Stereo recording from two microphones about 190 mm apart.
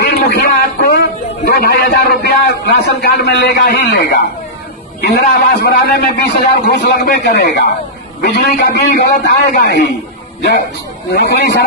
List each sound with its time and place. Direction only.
0.0 s a sound: 60° left (ahead or behind)
1.5 s a man's voice: 55° left (ahead or behind)
11.1 s a man's voice: 60° left (ahead or behind)